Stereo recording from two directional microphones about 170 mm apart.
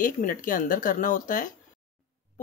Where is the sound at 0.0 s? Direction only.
50° left (ahead or behind).